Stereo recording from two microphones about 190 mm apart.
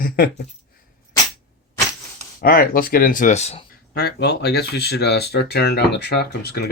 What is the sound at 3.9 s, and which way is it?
Speech, 55° left (ahead or behind).